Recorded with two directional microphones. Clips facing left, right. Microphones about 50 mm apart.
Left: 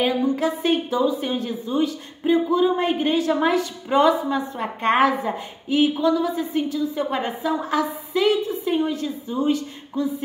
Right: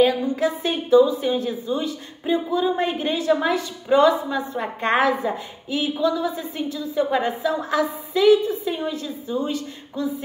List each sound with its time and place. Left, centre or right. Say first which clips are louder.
0.0 s a woman's voice: right 2 dB; left